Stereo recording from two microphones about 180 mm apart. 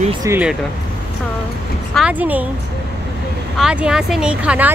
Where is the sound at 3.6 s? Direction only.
5° right (ahead or behind).